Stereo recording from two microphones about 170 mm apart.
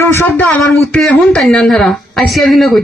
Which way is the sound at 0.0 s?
15° left (ahead or behind).